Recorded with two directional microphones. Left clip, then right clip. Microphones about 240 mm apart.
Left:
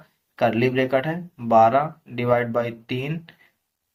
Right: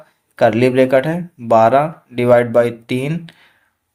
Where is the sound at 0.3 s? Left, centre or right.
Right.